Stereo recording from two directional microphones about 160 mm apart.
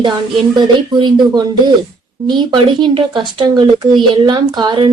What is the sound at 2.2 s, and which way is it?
A child's voice, 30° right (ahead or behind).